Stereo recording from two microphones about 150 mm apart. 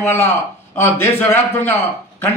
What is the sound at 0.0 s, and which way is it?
A man's voice, 15° left (ahead or behind).